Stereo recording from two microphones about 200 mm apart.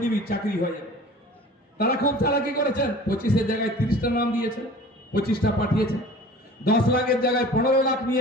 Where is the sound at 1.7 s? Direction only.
50° left (ahead or behind).